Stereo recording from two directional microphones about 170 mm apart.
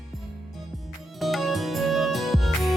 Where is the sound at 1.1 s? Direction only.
Centre (ahead or behind).